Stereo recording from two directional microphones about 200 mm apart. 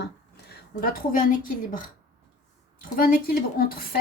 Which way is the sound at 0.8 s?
45° left (ahead or behind).